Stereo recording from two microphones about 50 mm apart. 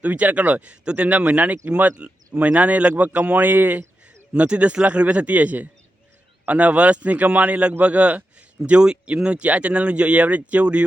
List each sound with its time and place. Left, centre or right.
0.0 s speech: right